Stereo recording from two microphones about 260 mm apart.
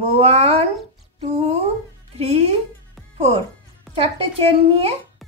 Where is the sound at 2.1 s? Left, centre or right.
Right.